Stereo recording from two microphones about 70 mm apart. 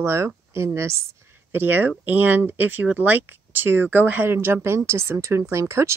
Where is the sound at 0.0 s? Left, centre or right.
Right.